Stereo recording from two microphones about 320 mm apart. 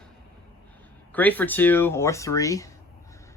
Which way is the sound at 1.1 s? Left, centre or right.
Centre.